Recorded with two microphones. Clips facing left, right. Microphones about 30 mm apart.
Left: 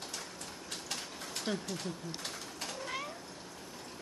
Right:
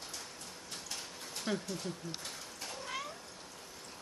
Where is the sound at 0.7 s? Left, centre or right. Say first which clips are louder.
Left 3 dB; left.